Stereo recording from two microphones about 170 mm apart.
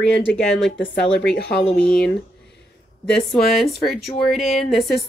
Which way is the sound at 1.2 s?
70° left (ahead or behind).